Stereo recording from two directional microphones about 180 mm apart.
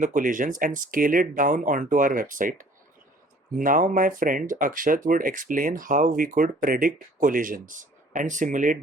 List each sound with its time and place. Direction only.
0.0 s speech: 45° right (ahead or behind)